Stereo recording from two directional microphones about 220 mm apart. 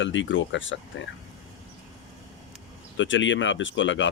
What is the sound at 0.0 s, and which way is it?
Speech, 55° left (ahead or behind).